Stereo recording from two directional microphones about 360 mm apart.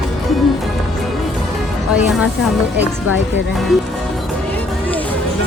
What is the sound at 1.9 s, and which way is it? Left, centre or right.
Speech, centre.